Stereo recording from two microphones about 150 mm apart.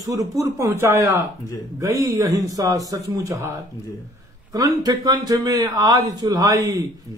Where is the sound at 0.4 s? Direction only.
20° right (ahead or behind).